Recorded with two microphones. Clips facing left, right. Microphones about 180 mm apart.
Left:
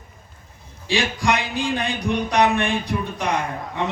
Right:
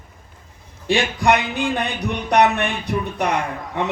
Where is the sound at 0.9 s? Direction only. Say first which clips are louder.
Right 4 dB; 60° right (ahead or behind).